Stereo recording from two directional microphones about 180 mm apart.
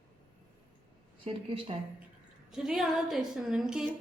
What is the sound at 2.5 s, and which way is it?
Speech, 5° right (ahead or behind).